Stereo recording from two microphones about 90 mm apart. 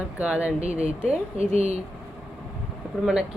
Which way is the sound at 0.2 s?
15° right (ahead or behind).